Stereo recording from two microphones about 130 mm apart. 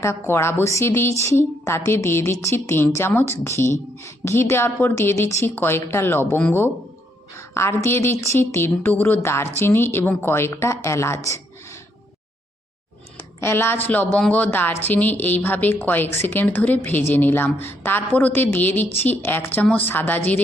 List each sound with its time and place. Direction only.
0.0 s speech: 20° left (ahead or behind)
13.4 s a woman's voice: 20° left (ahead or behind)